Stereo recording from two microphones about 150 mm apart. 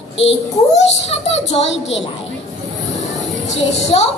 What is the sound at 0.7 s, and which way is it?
Speech, 45° left (ahead or behind).